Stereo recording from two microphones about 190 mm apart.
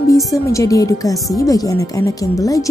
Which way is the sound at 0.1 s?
15° left (ahead or behind).